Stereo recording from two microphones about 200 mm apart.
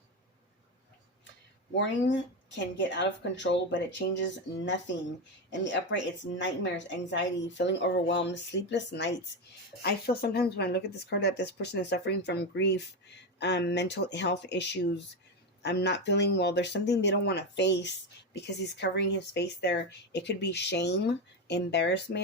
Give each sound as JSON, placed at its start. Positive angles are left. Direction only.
{"t": 1.7, "sound": "speech", "side_deg": 65}